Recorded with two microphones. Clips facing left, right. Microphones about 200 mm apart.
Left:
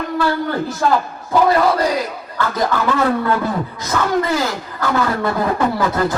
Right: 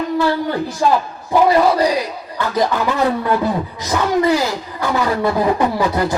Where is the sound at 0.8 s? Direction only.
15° right (ahead or behind).